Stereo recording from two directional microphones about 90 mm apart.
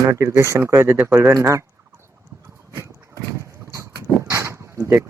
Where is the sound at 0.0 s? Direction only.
35° right (ahead or behind).